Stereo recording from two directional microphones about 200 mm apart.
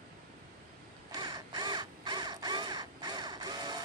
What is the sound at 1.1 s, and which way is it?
Crow, 20° right (ahead or behind).